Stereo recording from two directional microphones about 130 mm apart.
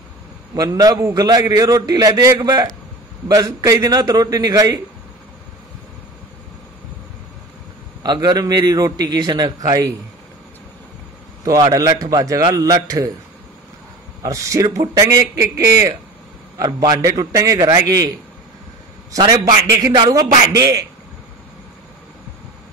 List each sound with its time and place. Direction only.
0.6 s a man's voice: 30° right (ahead or behind)
8.0 s a man's voice: 30° right (ahead or behind)
11.4 s a man's voice: 30° right (ahead or behind)
14.2 s a man's voice: 25° right (ahead or behind)
19.1 s a man's voice: 30° right (ahead or behind)